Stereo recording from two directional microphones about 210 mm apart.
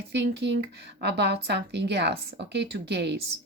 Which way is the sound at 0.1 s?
55° right (ahead or behind).